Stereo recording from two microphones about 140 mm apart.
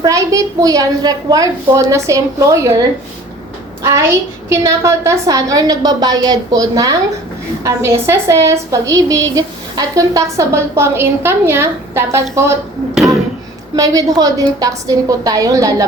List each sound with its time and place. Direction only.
0.0 s a woman's voice: 25° right (ahead or behind)
3.8 s a woman's voice: 20° right (ahead or behind)
12.9 s a sound: 5° right (ahead or behind)
13.7 s a woman's voice: 25° right (ahead or behind)